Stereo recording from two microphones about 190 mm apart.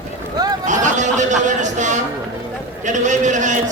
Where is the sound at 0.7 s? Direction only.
40° right (ahead or behind).